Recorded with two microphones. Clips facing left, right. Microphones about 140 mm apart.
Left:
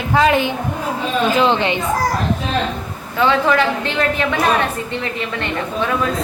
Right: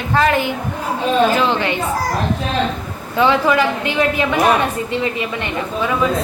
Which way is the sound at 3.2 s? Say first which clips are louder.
Right 1 dB; 15° right (ahead or behind).